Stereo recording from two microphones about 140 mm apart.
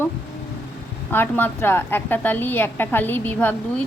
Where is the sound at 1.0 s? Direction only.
15° left (ahead or behind).